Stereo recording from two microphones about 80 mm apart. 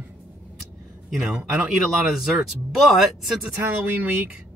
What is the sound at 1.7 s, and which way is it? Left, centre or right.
Speech, centre.